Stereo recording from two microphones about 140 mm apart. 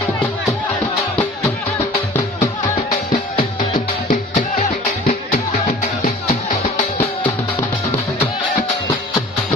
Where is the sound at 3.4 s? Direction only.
75° left (ahead or behind).